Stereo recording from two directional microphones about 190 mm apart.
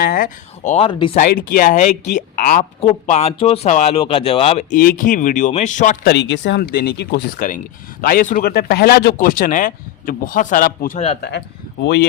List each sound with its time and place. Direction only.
0.0 s speech: 50° left (ahead or behind)
0.9 s speech: 25° left (ahead or behind)
1.3 s speech: 50° left (ahead or behind)
6.1 s speech: 65° left (ahead or behind)
8.0 s speech: 45° left (ahead or behind)
11.2 s speech: 60° left (ahead or behind)